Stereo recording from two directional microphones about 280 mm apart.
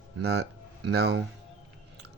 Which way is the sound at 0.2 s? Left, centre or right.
Right.